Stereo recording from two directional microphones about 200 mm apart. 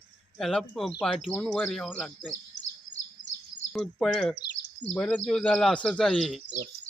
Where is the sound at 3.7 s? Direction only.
Centre (ahead or behind).